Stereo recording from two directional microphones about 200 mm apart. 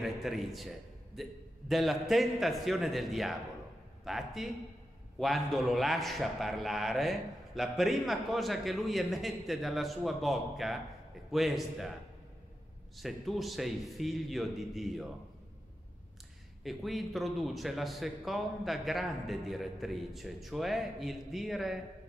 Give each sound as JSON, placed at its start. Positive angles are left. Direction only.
{"t": 0.0, "sound": "a man's voice", "side_deg": 0}
{"t": 12.9, "sound": "a man's voice", "side_deg": 0}
{"t": 16.6, "sound": "a man's voice", "side_deg": 0}